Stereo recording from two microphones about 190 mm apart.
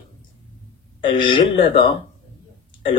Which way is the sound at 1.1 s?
25° left (ahead or behind).